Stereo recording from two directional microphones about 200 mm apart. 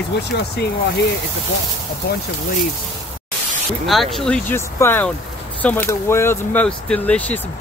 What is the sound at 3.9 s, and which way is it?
Speech, centre (ahead or behind).